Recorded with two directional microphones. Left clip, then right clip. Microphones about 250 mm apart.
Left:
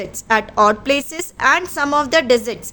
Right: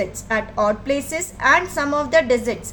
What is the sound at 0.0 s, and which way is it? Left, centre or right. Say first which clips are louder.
A woman's voice: left 4 dB; left.